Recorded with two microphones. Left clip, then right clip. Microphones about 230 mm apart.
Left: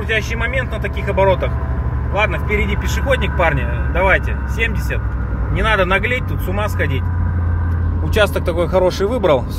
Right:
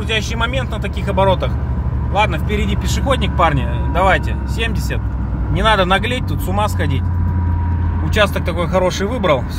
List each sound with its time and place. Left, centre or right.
1.0 s speech: centre
5.5 s speech: centre
8.1 s speech: centre